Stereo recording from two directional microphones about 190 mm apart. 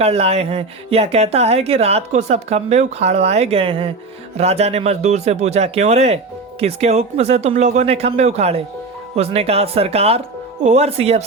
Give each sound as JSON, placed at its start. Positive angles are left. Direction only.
{"t": 0.0, "sound": "speech", "side_deg": -35}